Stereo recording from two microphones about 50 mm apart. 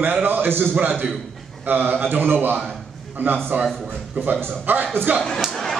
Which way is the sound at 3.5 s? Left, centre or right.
Right.